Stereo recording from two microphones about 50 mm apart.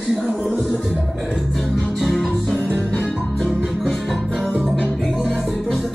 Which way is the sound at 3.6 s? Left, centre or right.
Centre.